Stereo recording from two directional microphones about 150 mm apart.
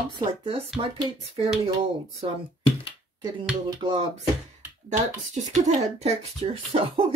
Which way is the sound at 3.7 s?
35° right (ahead or behind).